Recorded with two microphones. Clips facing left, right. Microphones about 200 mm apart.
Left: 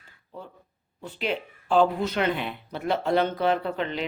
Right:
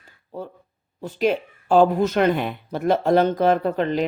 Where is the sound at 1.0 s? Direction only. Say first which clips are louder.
Right 8 dB; 40° right (ahead or behind).